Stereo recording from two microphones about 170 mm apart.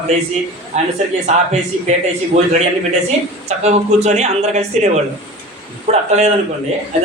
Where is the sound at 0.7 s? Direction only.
40° right (ahead or behind).